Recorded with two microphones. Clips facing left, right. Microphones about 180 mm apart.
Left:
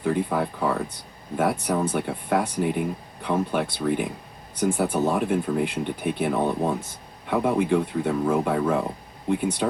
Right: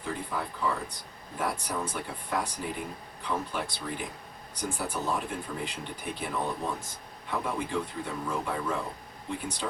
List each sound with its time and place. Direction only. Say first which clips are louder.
0.0 s speech: left 10 dB; 60° left (ahead or behind)